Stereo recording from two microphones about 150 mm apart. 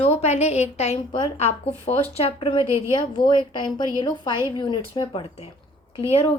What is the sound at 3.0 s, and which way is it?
A woman's voice, 30° left (ahead or behind).